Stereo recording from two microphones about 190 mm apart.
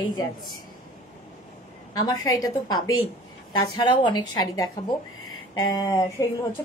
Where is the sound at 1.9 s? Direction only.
20° left (ahead or behind).